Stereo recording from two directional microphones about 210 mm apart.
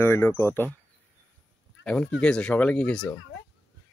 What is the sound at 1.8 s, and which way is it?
Speech, 5° left (ahead or behind).